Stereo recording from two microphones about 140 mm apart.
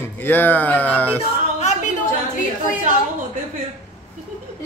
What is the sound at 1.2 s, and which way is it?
Music, 55° left (ahead or behind).